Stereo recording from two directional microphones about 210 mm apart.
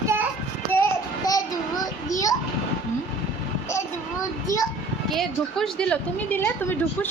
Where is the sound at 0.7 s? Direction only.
15° left (ahead or behind).